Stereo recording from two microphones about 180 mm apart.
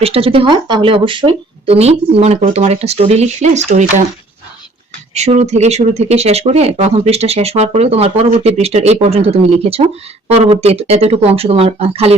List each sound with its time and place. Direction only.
0.0 s speech: 35° right (ahead or behind)
5.1 s speech: 40° right (ahead or behind)